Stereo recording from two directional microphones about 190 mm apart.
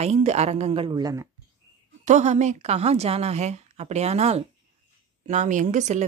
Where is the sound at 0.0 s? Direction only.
35° right (ahead or behind); by 1.3 s 20° right (ahead or behind).